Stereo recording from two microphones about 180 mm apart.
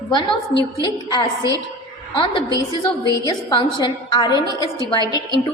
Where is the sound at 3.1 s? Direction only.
20° left (ahead or behind).